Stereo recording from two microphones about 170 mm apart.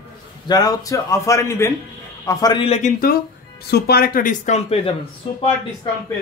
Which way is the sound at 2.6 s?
40° left (ahead or behind).